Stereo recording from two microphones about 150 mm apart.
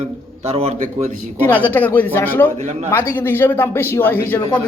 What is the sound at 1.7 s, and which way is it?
A woman's voice, 10° left (ahead or behind).